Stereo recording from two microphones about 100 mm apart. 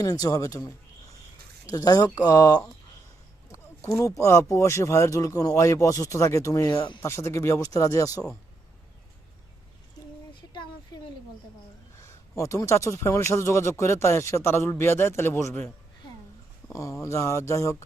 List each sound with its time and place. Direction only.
0.0 s speech: 40° left (ahead or behind)
10.5 s a sound: 50° left (ahead or behind)
12.0 s speech: 30° left (ahead or behind)
16.7 s speech: 30° left (ahead or behind)